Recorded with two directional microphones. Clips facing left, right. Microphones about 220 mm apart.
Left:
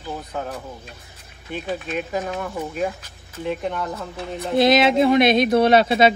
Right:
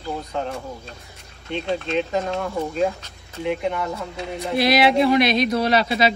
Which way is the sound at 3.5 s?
10° right (ahead or behind).